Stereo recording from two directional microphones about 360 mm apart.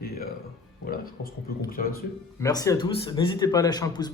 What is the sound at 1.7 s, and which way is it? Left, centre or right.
Speech, left.